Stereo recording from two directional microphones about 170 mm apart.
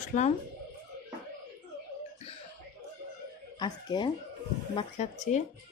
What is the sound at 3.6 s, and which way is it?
Speech, 25° left (ahead or behind).